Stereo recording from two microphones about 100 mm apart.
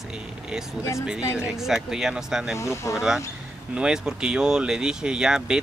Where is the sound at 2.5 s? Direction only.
30° left (ahead or behind).